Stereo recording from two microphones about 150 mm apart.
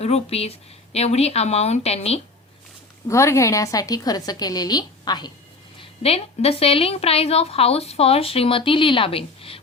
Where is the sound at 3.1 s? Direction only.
20° left (ahead or behind).